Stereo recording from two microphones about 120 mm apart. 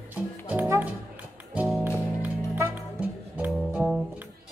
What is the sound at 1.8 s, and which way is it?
Music, 15° right (ahead or behind).